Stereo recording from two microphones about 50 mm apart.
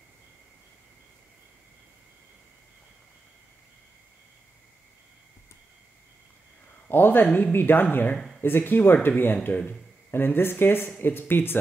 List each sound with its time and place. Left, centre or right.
6.9 s speech: left